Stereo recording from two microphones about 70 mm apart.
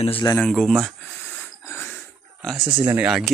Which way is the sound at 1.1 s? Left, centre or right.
Left.